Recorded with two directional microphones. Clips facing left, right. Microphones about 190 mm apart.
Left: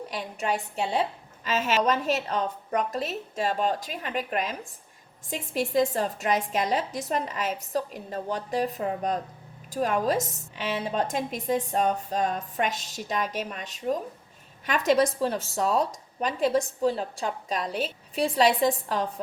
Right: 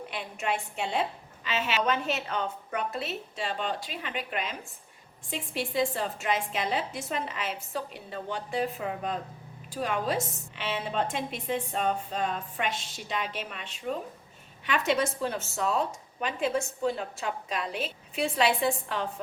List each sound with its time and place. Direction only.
0.0 s a woman's voice: 40° left (ahead or behind)